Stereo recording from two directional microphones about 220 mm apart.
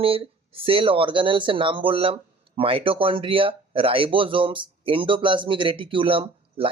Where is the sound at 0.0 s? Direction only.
25° right (ahead or behind).